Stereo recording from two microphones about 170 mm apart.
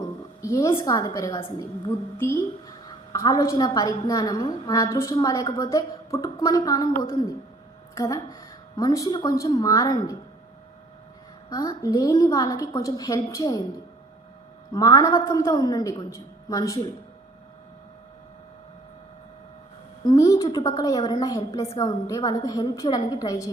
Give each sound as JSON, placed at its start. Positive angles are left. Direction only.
{"t": 0.4, "sound": "a woman's voice", "side_deg": 20}
{"t": 11.4, "sound": "a woman's voice", "side_deg": 20}
{"t": 20.1, "sound": "a woman's voice", "side_deg": 20}